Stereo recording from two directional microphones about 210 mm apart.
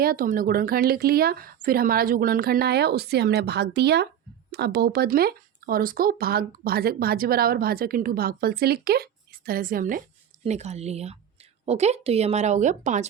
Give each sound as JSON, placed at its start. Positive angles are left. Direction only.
{"t": 0.0, "sound": "speech", "side_deg": -45}
{"t": 10.4, "sound": "speech", "side_deg": -30}